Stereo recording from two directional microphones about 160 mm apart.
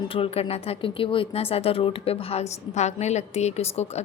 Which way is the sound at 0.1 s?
35° left (ahead or behind).